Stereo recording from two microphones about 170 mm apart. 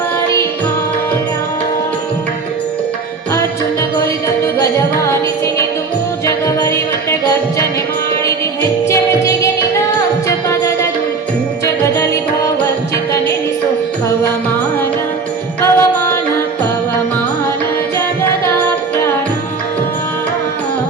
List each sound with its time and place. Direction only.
6.2 s music: 20° left (ahead or behind)
8.9 s music: 20° left (ahead or behind)
15.6 s music: 15° left (ahead or behind)